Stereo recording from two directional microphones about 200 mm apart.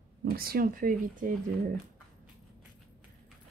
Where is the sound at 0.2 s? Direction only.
50° right (ahead or behind).